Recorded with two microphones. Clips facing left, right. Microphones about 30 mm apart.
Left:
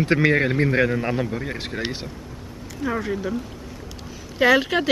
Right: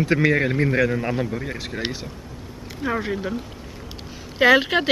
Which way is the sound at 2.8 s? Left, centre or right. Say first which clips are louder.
Even; centre.